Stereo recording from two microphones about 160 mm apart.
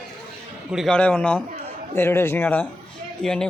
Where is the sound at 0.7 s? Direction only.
Centre (ahead or behind).